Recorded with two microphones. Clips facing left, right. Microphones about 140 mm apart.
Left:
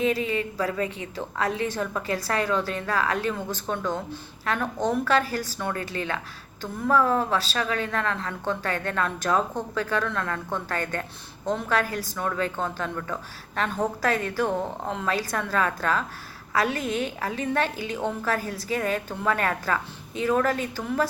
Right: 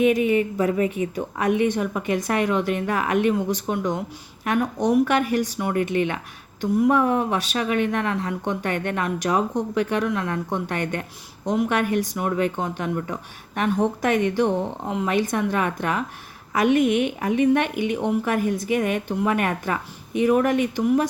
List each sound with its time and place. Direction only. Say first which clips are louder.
0.3 s a woman's voice: right 7 dB; 20° right (ahead or behind)